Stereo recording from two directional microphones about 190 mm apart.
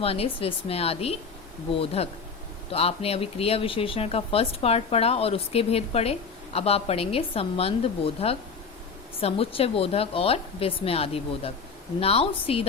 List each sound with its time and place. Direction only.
0.0 s speech: 30° left (ahead or behind)